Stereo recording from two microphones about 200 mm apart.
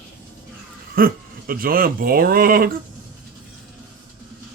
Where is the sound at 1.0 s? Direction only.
45° right (ahead or behind).